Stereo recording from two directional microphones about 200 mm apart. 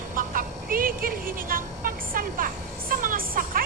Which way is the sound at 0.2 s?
45° right (ahead or behind).